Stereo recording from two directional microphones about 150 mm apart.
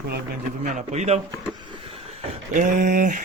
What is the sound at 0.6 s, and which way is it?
Speech, 55° right (ahead or behind).